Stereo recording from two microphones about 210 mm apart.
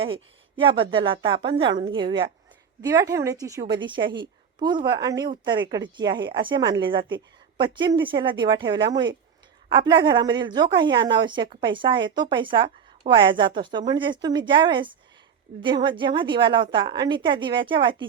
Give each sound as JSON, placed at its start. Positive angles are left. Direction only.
{"t": 0.6, "sound": "a woman's voice", "side_deg": -25}